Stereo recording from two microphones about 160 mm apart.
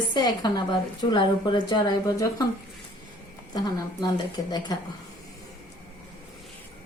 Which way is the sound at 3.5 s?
25° left (ahead or behind).